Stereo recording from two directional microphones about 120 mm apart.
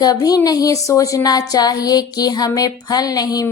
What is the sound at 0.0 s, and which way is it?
A woman's voice, 30° left (ahead or behind).